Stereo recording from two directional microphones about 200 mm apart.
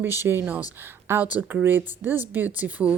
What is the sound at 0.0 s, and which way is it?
Speech, 10° right (ahead or behind).